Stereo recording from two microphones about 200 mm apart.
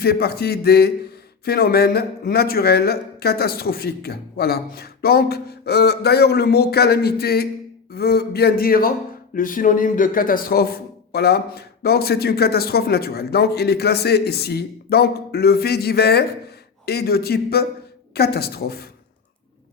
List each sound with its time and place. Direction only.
0.0 s a man's voice: 50° left (ahead or behind)